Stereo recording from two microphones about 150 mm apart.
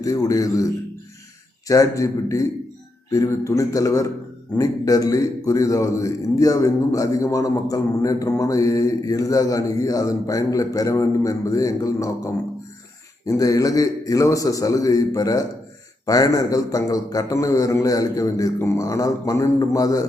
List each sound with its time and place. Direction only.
0.0 s a man's voice: 20° left (ahead or behind)